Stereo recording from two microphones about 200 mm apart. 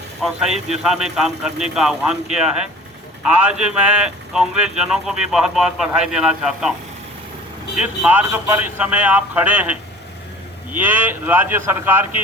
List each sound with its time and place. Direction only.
0.2 s speech: centre (ahead or behind)
3.3 s speech: 5° right (ahead or behind)
7.8 s a man's voice: 5° right (ahead or behind)
10.8 s a man's voice: 10° right (ahead or behind)